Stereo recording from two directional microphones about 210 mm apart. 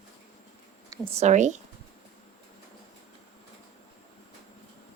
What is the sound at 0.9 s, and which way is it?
Speech, 25° right (ahead or behind).